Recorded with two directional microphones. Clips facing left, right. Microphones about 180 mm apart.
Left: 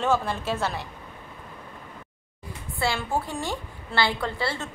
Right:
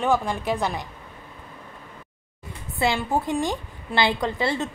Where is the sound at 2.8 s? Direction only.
20° right (ahead or behind).